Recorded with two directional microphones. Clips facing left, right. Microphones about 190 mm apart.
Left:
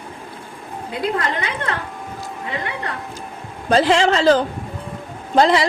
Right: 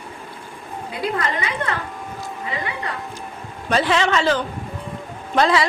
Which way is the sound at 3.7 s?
30° left (ahead or behind).